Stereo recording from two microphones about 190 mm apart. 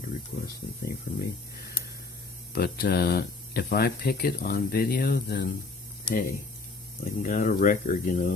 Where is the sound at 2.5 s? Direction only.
55° left (ahead or behind).